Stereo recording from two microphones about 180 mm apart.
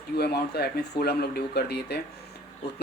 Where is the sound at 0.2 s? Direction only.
65° left (ahead or behind).